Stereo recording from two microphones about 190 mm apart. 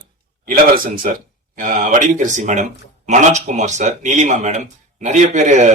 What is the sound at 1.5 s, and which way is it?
Speech, 45° right (ahead or behind).